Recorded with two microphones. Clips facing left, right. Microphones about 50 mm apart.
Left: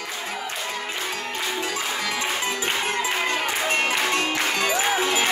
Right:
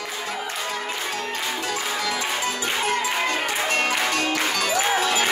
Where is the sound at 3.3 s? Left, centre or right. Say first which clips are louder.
Even; left.